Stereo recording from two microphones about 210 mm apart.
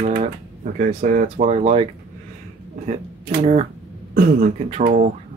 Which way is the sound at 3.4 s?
30° right (ahead or behind).